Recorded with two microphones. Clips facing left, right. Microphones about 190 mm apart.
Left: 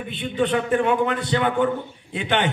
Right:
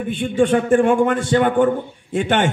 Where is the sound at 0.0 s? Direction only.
45° right (ahead or behind).